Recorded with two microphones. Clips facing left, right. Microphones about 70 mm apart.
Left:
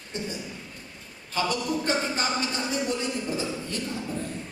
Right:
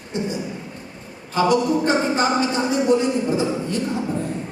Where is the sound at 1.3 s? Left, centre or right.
Right.